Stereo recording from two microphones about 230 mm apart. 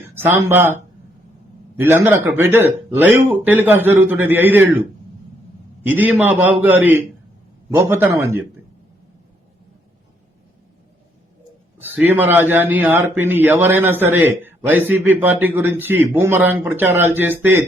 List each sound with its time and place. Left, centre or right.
0.1 s a man's voice: centre
5.8 s a man's voice: centre
11.8 s a man's voice: centre